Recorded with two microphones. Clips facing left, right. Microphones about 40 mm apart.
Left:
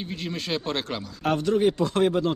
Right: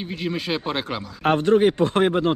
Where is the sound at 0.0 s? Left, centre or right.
Centre.